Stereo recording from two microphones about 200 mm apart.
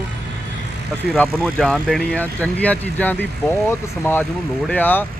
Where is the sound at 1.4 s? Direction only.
Centre (ahead or behind).